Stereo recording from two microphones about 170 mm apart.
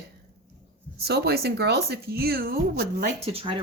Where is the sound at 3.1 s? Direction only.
40° right (ahead or behind).